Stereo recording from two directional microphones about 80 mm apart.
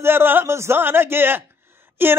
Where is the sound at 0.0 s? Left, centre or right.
Right.